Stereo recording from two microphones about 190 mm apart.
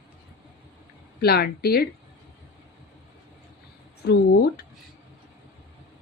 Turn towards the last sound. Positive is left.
turn(degrees=55)  # may be behind; listen again after turning